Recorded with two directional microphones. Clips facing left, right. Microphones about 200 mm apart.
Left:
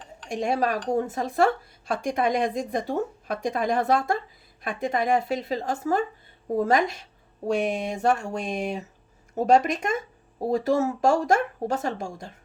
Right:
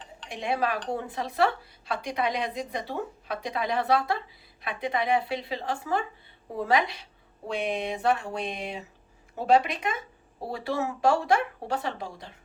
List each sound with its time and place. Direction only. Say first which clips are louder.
0.3 s a woman's voice: left 4 dB; 45° left (ahead or behind)